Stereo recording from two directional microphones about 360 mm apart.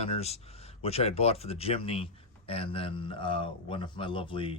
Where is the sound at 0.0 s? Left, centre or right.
Centre.